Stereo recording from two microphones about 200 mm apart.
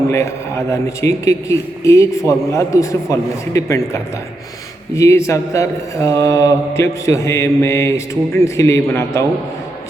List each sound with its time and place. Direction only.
0.1 s mantra: 15° left (ahead or behind)